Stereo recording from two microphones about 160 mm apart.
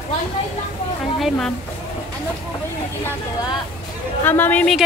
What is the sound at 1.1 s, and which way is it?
Speech, centre (ahead or behind).